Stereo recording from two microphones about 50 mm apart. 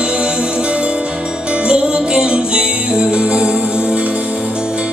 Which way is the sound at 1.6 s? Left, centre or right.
Right.